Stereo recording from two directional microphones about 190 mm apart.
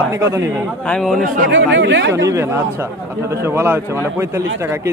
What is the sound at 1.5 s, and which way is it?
Speech, 75° right (ahead or behind).